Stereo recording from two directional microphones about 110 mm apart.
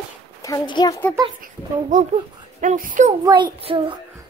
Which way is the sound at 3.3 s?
30° right (ahead or behind).